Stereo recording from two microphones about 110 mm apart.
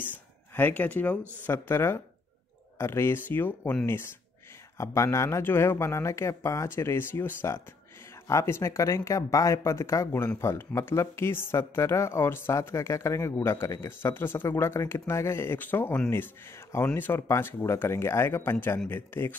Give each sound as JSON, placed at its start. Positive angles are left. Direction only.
{"t": 0.6, "sound": "speech", "side_deg": 15}
{"t": 4.7, "sound": "speech", "side_deg": 25}